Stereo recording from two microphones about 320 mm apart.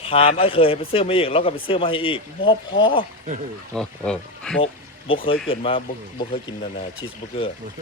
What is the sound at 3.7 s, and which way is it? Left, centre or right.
Speech, centre.